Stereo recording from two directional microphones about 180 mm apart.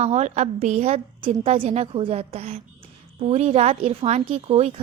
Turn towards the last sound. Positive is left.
turn(degrees=-30)  # may be behind; listen again after turning